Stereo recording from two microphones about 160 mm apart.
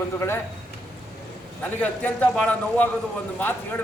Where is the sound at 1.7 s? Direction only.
10° left (ahead or behind).